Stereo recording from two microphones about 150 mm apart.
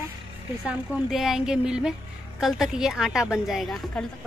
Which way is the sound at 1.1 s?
Centre (ahead or behind).